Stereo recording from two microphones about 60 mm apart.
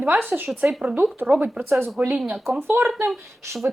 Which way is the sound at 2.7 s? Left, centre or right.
Right.